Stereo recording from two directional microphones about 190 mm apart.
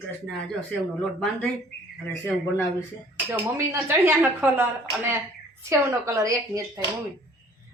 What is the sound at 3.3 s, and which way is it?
Speech, 15° right (ahead or behind).